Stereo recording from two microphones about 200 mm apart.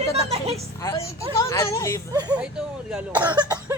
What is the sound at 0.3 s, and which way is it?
Speech, 30° right (ahead or behind).